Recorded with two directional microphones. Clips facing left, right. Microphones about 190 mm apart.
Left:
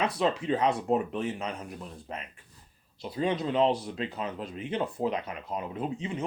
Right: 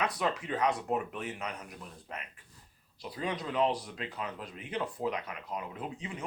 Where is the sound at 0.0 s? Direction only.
25° left (ahead or behind).